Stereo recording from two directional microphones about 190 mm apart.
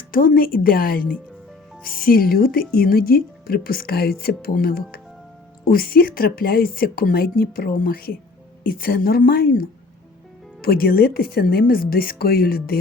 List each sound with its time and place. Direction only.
0.1 s speech: 45° left (ahead or behind)